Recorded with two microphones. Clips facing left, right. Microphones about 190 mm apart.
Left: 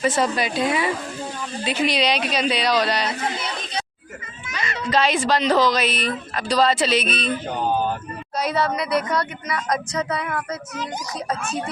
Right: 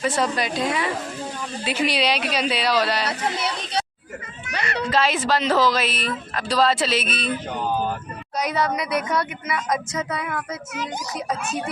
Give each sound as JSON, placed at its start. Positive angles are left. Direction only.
{"t": 0.0, "sound": "speech", "side_deg": 0}
{"t": 3.1, "sound": "speech", "side_deg": -75}
{"t": 4.4, "sound": "children playing", "side_deg": -65}
{"t": 4.9, "sound": "speech", "side_deg": 0}
{"t": 8.5, "sound": "speech", "side_deg": 0}